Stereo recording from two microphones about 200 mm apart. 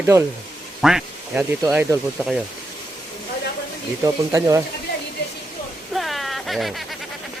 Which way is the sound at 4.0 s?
15° right (ahead or behind).